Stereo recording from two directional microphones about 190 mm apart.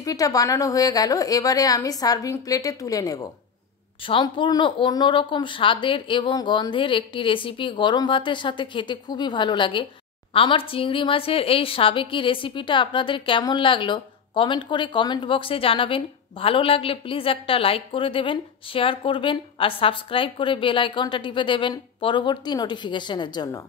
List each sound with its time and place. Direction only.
0.0 s a woman's voice: 20° left (ahead or behind)